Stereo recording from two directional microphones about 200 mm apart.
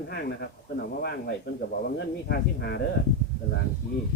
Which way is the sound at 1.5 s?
50° left (ahead or behind).